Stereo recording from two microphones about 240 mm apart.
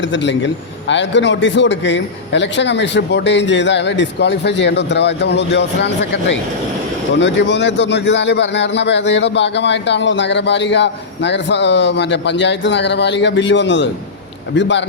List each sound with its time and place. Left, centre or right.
0.0 s a man's voice: left
7.2 s a man's voice: left